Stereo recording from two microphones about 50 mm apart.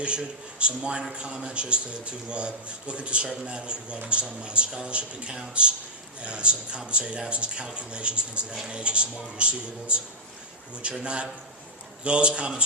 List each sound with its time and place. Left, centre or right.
0.0 s a man's voice: right
11.0 s a man's voice: right